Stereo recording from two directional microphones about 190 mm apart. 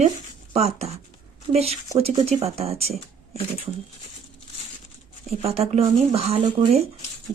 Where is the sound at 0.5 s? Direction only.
35° right (ahead or behind).